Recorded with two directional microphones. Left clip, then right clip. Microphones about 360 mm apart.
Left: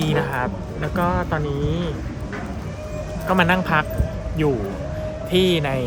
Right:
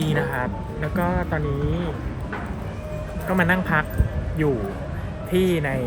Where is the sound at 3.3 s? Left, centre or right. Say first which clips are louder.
Left 3 dB; centre.